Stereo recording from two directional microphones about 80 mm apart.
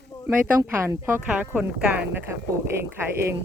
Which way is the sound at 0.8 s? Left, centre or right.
Right.